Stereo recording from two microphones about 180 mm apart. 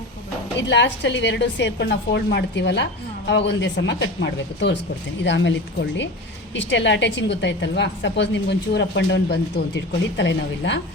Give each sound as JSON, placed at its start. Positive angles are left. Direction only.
{"t": 0.7, "sound": "a woman's voice", "side_deg": 75}